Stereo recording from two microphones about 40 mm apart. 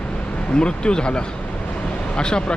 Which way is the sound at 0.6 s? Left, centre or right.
Left.